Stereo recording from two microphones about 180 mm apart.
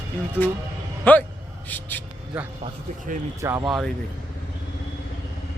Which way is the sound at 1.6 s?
10° left (ahead or behind).